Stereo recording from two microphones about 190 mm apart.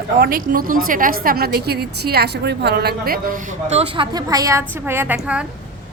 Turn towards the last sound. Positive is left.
turn(degrees=-10)  # may be behind; listen again after turning